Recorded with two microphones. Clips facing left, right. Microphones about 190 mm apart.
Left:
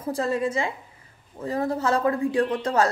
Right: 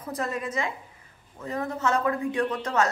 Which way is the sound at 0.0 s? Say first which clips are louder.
Left 6 dB; 30° left (ahead or behind).